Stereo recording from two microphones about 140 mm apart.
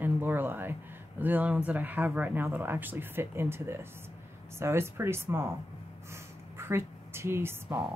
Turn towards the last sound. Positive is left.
turn(degrees=-15)  # may be behind; listen again after turning